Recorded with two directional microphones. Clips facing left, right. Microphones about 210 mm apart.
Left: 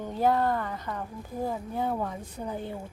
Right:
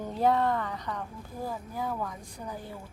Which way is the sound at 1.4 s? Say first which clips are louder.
Left 4 dB; 25° left (ahead or behind).